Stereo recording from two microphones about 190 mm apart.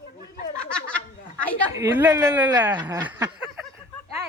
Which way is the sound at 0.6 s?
5° left (ahead or behind).